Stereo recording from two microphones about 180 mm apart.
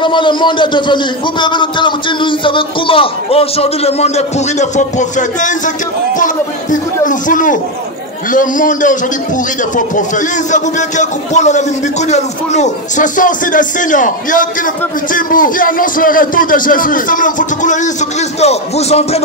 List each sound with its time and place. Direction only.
0.0 s a man's voice: 25° left (ahead or behind); by 17.9 s 45° left (ahead or behind)
18.4 s music: 35° left (ahead or behind)